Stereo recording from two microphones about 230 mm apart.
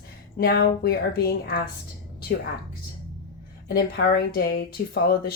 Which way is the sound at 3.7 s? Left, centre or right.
Left.